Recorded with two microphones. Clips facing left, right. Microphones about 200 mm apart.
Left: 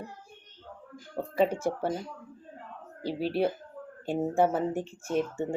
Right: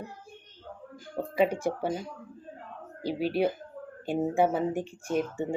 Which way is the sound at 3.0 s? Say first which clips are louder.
Right 1 dB; 30° left (ahead or behind).